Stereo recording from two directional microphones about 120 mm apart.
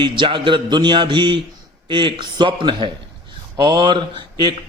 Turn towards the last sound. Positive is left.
turn(degrees=-40)  # may be behind; listen again after turning